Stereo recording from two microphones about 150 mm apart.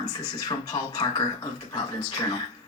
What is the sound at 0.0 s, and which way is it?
A woman's voice, 25° left (ahead or behind).